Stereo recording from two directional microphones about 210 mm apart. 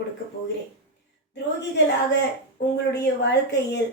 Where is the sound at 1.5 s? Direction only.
55° left (ahead or behind).